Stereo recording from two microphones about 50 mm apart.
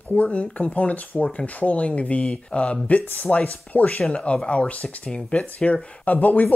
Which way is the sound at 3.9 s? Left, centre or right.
Centre.